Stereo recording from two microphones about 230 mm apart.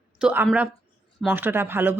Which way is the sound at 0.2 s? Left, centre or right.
Centre.